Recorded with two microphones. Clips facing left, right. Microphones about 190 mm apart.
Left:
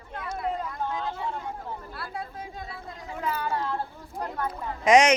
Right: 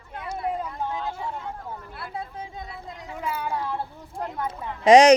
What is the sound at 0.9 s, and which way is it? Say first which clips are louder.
Vehicle: right 1 dB; 10° right (ahead or behind).